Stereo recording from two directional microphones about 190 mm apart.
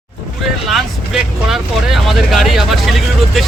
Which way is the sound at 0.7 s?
Centre (ahead or behind).